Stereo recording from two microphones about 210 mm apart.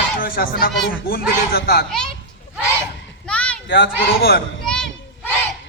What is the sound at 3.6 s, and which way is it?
Speech, 50° left (ahead or behind).